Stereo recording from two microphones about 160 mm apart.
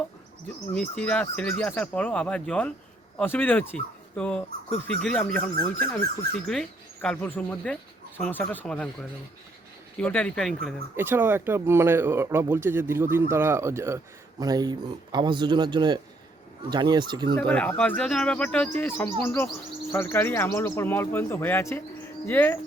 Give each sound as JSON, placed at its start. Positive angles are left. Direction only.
{"t": 0.7, "sound": "speech", "side_deg": 5}
{"t": 10.0, "sound": "speech", "side_deg": 10}
{"t": 10.9, "sound": "speech", "side_deg": -15}
{"t": 17.3, "sound": "speech", "side_deg": 5}